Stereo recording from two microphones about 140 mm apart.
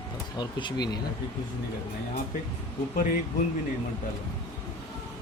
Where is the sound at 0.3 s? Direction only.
30° left (ahead or behind).